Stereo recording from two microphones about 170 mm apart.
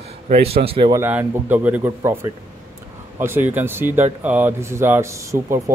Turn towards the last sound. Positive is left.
turn(degrees=-15)  # may be behind; listen again after turning